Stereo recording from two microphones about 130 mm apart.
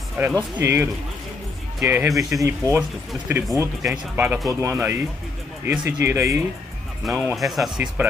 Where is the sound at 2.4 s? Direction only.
20° right (ahead or behind).